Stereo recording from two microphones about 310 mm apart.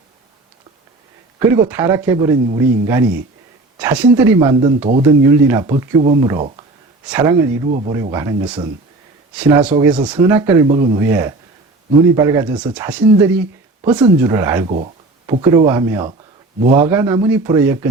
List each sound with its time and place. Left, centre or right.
1.4 s speech: centre
14.7 s speech: right
15.3 s speech: centre